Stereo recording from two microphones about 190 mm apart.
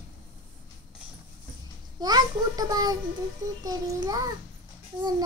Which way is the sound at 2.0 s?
20° right (ahead or behind).